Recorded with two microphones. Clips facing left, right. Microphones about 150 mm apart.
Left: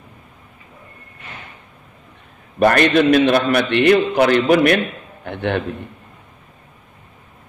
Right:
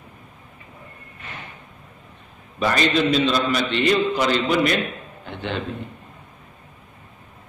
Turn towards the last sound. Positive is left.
turn(degrees=60)  # may be behind; listen again after turning